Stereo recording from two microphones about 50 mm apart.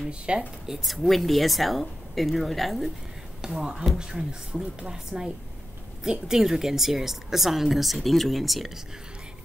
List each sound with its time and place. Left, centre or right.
0.3 s speech: centre
0.7 s a woman's voice: centre
3.4 s a woman's voice: centre